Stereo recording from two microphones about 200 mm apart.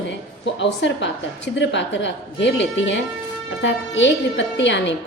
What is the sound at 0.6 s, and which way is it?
A woman's voice, 65° left (ahead or behind).